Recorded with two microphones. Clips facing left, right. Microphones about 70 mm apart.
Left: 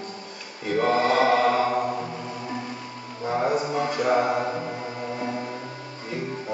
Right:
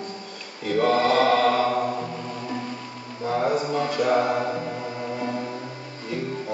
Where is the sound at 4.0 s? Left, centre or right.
Centre.